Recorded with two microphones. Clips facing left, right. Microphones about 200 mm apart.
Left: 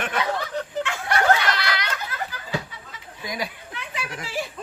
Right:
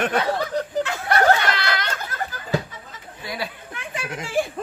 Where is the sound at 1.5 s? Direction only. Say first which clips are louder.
Right 2 dB; 45° right (ahead or behind).